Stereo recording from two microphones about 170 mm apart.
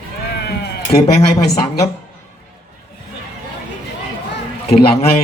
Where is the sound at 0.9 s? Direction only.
25° left (ahead or behind).